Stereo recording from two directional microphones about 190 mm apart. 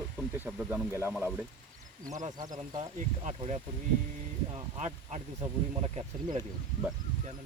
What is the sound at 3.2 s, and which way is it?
Speech, 35° right (ahead or behind).